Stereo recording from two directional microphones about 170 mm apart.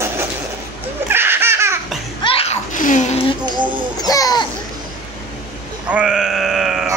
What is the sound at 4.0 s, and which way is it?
Music, 20° left (ahead or behind).